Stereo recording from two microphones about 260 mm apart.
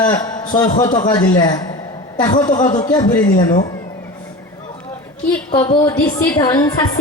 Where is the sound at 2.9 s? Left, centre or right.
Centre.